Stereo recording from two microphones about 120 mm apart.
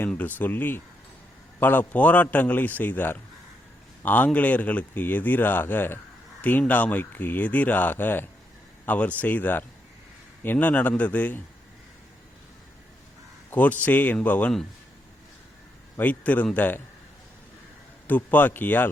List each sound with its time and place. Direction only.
0.0 s speech: 15° left (ahead or behind)
13.5 s speech: 15° left (ahead or behind)
16.0 s speech: 15° left (ahead or behind)
18.1 s speech: 15° left (ahead or behind)